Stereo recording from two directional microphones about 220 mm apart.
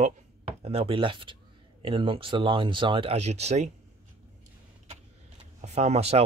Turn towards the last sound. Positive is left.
turn(degrees=-30)  # may be behind; listen again after turning